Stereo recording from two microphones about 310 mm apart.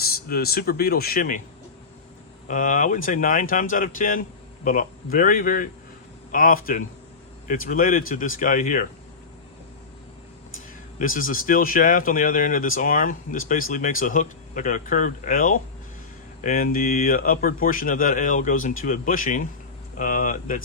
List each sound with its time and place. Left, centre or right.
0.0 s speech: left
2.5 s speech: left
10.9 s speech: left